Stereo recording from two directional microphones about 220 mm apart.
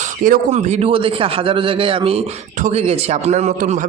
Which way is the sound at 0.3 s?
30° right (ahead or behind).